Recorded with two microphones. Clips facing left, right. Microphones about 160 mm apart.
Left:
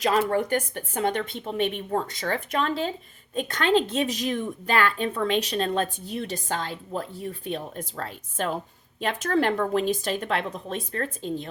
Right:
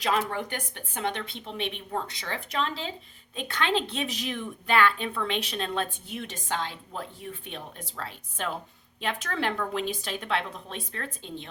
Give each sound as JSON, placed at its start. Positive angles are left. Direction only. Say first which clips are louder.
{"t": 0.0, "sound": "a woman's voice", "louder": "left 5 dB", "side_deg": 45}